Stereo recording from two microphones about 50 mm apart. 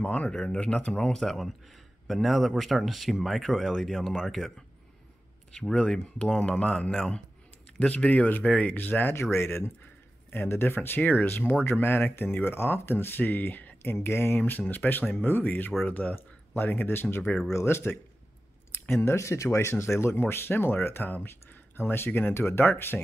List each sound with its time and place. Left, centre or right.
0.0 s speech: left
0.3 s speech: centre
3.8 s speech: centre
5.6 s speech: centre
7.9 s speech: left
8.7 s speech: left
9.1 s speech: left
17.5 s speech: left
18.7 s a sound: left
18.9 s speech: left
19.8 s speech: left